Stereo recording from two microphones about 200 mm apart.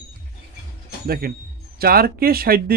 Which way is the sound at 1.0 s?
50° right (ahead or behind).